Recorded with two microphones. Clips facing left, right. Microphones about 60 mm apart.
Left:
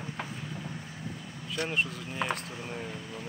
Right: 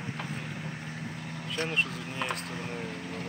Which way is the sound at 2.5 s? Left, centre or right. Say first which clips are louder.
Right 2 dB; right.